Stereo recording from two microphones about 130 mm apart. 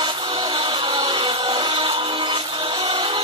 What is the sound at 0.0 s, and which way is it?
Music, 40° right (ahead or behind).